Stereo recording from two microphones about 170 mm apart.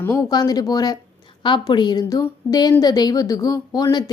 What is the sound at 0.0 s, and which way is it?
A woman's voice, 15° left (ahead or behind).